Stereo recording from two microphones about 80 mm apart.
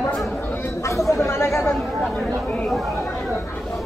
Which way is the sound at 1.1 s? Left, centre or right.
Left.